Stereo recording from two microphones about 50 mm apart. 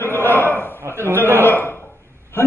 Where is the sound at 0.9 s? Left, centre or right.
Left.